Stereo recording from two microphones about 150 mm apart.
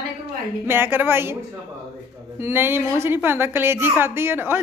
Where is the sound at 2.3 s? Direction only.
15° right (ahead or behind).